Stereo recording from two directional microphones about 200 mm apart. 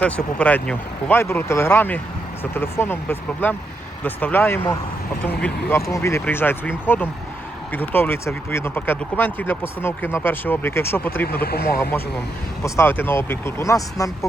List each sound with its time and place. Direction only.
0.0 s speech: 5° left (ahead or behind)
11.3 s speech: 50° left (ahead or behind)
11.8 s speech: 10° left (ahead or behind)